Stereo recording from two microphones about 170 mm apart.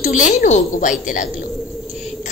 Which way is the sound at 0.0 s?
50° left (ahead or behind).